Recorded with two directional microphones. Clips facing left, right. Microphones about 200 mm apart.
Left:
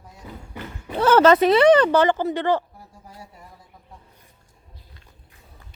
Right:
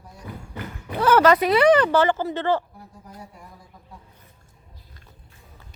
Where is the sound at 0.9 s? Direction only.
25° left (ahead or behind).